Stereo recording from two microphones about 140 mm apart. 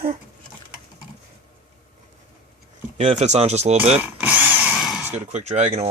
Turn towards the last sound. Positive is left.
turn(degrees=-50)  # may be behind; listen again after turning